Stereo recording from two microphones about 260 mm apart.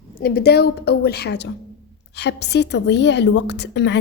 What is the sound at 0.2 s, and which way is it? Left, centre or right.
A woman's voice, left.